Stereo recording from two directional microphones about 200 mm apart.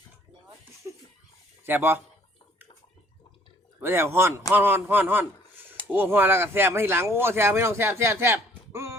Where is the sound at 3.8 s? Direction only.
10° right (ahead or behind).